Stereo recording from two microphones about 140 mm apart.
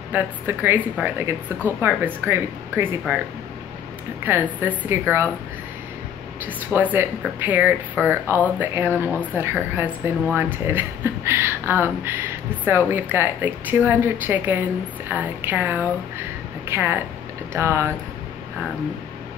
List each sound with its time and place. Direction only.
0.1 s speech: 15° right (ahead or behind)
4.2 s speech: 15° right (ahead or behind)
6.4 s speech: 15° right (ahead or behind)